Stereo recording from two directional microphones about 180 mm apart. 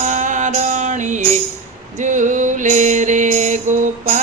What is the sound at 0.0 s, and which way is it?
Music, 45° right (ahead or behind).